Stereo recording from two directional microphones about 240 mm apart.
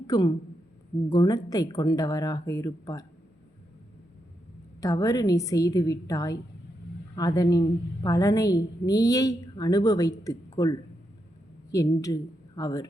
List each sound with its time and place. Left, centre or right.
0.1 s a woman's voice: centre
4.8 s a woman's voice: centre